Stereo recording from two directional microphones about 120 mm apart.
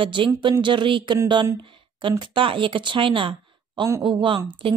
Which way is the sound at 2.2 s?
45° right (ahead or behind).